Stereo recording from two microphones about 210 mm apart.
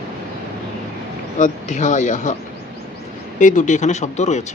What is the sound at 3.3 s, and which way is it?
Speech, 35° left (ahead or behind).